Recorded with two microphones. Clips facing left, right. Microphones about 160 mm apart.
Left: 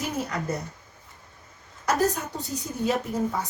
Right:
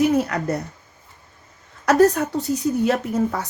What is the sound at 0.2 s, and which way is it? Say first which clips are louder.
Speech: right 7 dB; 70° right (ahead or behind).